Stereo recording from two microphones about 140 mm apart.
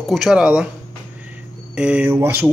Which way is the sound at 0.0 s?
Centre (ahead or behind).